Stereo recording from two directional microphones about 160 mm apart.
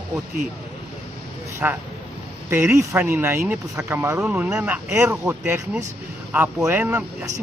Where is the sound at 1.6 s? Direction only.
15° right (ahead or behind).